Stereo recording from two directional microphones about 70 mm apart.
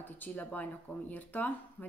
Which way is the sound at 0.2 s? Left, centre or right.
Left.